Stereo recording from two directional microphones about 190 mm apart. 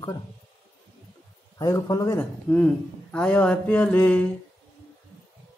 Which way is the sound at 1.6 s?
20° left (ahead or behind).